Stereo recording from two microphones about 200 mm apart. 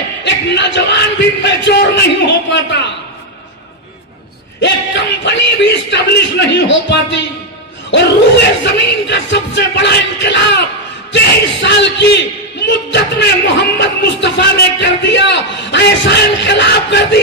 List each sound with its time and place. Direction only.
0.2 s speech: 60° left (ahead or behind)
4.6 s speech: 60° left (ahead or behind)
8.7 s speech: 60° left (ahead or behind)